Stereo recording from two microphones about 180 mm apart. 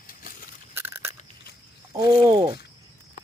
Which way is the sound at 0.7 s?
15° right (ahead or behind).